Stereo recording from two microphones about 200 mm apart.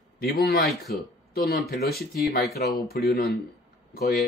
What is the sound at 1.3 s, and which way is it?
Speech, 50° left (ahead or behind).